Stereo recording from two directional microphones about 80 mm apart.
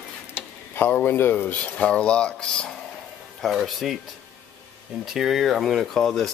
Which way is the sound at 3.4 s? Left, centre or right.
Centre.